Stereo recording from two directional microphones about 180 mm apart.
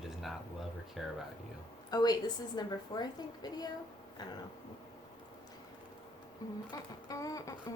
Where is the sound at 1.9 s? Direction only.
20° left (ahead or behind).